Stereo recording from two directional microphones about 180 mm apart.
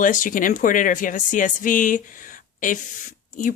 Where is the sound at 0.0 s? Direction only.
50° left (ahead or behind).